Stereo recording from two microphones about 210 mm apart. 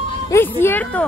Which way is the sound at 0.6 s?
10° left (ahead or behind).